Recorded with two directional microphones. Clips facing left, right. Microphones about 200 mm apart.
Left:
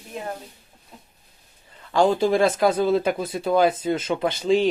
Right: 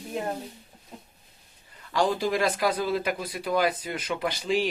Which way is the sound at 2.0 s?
25° left (ahead or behind).